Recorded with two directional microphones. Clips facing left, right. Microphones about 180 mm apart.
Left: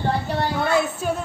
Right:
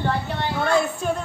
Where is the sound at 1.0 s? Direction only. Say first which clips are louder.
Even; 5° left (ahead or behind).